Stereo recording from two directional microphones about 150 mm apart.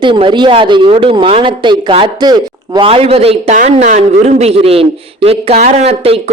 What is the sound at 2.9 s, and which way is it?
A woman's voice, 40° right (ahead or behind).